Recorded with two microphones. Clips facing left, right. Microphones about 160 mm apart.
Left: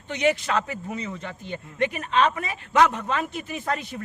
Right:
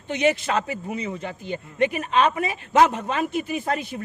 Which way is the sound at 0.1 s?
20° right (ahead or behind).